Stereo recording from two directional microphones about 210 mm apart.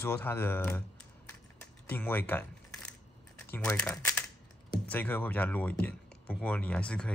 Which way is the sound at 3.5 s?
5° left (ahead or behind).